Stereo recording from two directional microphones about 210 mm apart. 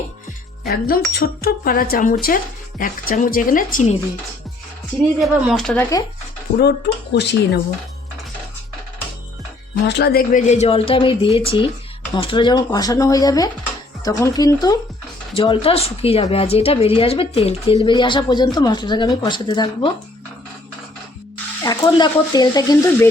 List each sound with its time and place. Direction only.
0.7 s speech: 45° left (ahead or behind)
5.2 s speech: centre (ahead or behind)
6.6 s speech: 50° left (ahead or behind)
9.8 s a woman's voice: 50° left (ahead or behind); by 19.9 s 20° left (ahead or behind)
21.6 s a woman's voice: 15° left (ahead or behind)